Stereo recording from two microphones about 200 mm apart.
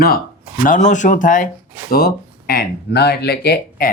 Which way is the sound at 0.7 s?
40° left (ahead or behind).